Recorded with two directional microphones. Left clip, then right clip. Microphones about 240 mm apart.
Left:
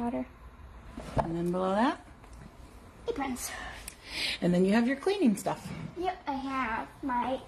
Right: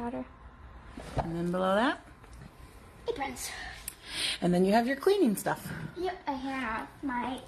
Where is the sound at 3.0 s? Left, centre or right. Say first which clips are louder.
Even; left.